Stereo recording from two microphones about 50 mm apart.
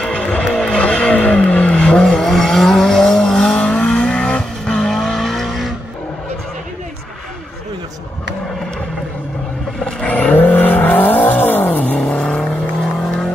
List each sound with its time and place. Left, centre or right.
0.0 s vehicle: centre
3.8 s vehicle: left
4.6 s vehicle: centre
9.8 s vehicle: centre
10.0 s vehicle: left
10.4 s vehicle: left
12.1 s vehicle: centre